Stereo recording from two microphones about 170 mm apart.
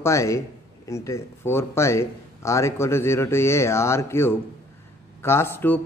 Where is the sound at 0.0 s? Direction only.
15° left (ahead or behind).